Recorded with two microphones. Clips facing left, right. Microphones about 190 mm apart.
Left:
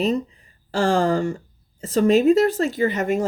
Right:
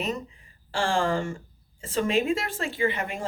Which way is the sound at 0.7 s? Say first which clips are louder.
Left 6 dB; 40° left (ahead or behind).